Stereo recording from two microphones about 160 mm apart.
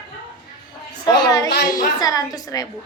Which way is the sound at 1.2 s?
25° left (ahead or behind).